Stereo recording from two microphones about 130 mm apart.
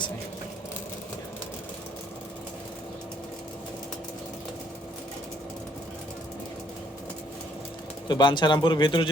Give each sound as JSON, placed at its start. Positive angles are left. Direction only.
{"t": 8.0, "sound": "speech", "side_deg": 35}